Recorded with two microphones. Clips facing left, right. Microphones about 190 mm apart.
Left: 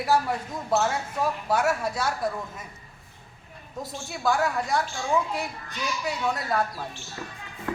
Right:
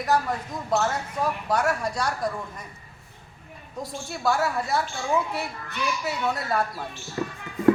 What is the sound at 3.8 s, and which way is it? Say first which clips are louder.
A woman's voice: right 1 dB; centre (ahead or behind).